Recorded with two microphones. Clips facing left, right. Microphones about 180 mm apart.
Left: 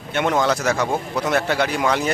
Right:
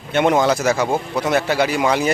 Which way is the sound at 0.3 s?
10° right (ahead or behind).